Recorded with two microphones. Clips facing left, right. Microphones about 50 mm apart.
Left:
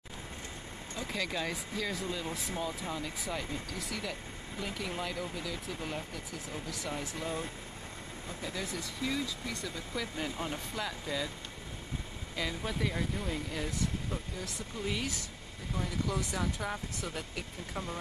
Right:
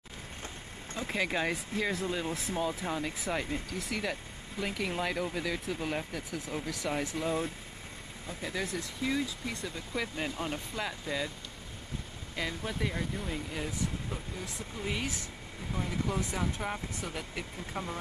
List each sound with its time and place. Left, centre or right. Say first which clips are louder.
0.9 s speech: right 4 dB; right
5.3 s speech: right 5 dB; right
8.5 s speech: right 4 dB; right
12.4 s speech: even; centre
17.4 s speech: right 2 dB; centre